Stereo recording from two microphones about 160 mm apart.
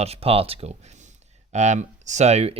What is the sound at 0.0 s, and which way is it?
Speech, 40° right (ahead or behind).